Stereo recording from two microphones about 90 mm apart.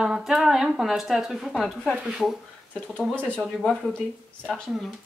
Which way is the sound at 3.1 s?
15° left (ahead or behind).